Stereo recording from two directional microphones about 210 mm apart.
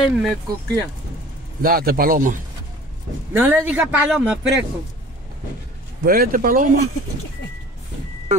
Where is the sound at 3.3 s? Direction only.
10° right (ahead or behind).